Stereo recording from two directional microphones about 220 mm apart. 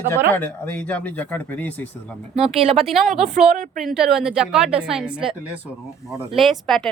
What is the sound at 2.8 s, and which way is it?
A woman's voice, centre (ahead or behind).